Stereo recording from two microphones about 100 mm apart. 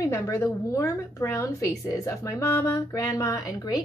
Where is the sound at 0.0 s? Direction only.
30° left (ahead or behind).